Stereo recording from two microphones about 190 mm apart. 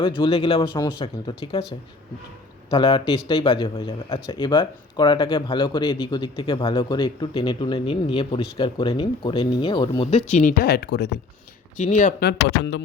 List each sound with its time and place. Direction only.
0.0 s a man's voice: 25° left (ahead or behind)
2.6 s a man's voice: 25° left (ahead or behind)
10.1 s speech: 40° left (ahead or behind)
10.7 s speech: 60° left (ahead or behind)
11.8 s speech: 40° left (ahead or behind)
12.2 s speech: 65° left (ahead or behind)